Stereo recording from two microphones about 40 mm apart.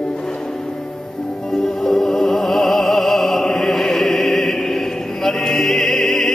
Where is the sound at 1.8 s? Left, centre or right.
Centre.